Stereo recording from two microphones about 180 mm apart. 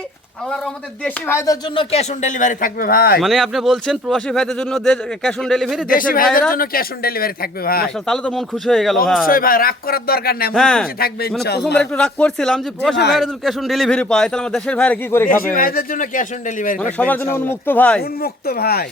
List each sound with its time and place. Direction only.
0.5 s speech: 5° left (ahead or behind)
1.3 s speech: 15° left (ahead or behind)
1.7 s speech: 30° left (ahead or behind); by 3.2 s 55° left (ahead or behind)
3.2 s speech: centre (ahead or behind)
5.9 s speech: 50° left (ahead or behind)
8.0 s speech: 5° left (ahead or behind)
9.2 s speech: 50° left (ahead or behind)
10.5 s speech: 5° left (ahead or behind)
15.5 s speech: 55° left (ahead or behind)
17.0 s speech: 10° left (ahead or behind)
18.0 s speech: 60° left (ahead or behind)